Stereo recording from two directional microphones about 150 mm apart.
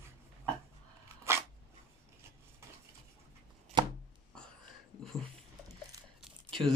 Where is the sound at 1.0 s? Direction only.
20° right (ahead or behind).